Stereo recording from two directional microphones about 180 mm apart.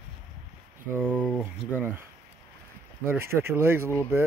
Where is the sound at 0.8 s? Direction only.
10° right (ahead or behind).